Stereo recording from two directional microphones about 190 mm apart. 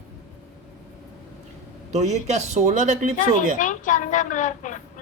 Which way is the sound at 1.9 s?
35° right (ahead or behind).